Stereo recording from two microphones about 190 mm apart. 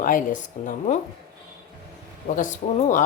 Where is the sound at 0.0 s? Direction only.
45° left (ahead or behind).